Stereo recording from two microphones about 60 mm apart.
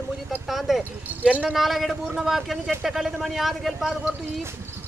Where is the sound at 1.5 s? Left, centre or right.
Centre.